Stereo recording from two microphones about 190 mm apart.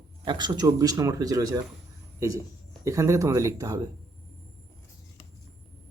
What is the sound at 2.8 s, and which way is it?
Speech, 15° right (ahead or behind).